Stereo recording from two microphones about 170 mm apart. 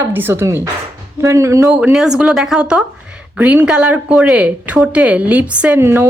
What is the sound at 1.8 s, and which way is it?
A woman's voice, 5° right (ahead or behind).